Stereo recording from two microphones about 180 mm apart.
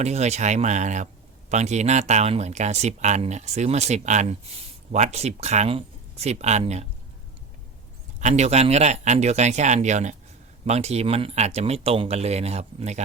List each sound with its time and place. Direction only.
0.0 s speech: 40° right (ahead or behind)
8.2 s speech: 40° right (ahead or behind)